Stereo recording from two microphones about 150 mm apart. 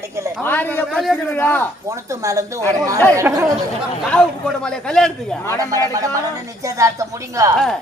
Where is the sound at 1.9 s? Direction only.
20° right (ahead or behind).